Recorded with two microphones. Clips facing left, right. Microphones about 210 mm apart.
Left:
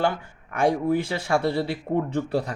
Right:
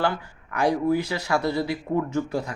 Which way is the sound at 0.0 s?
25° left (ahead or behind).